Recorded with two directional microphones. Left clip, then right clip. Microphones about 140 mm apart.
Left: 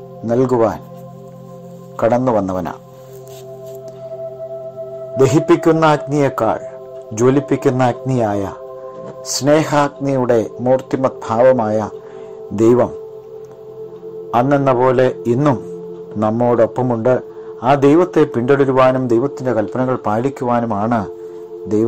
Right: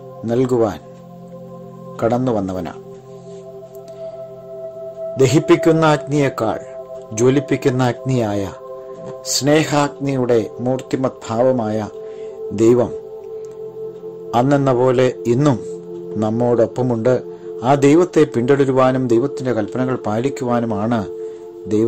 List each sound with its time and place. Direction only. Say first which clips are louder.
0.3 s speech: left 2 dB; 5° right (ahead or behind)
2.0 s speech: left 4 dB; 5° right (ahead or behind)
5.1 s speech: left 1 dB; 5° right (ahead or behind)
12.5 s speech: left 1 dB; 5° right (ahead or behind)
14.3 s a man's voice: left 2 dB; 15° right (ahead or behind)